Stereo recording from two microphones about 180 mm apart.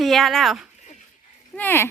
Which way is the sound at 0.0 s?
Centre (ahead or behind).